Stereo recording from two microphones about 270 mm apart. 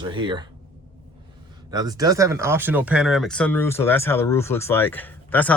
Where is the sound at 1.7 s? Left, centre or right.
Centre.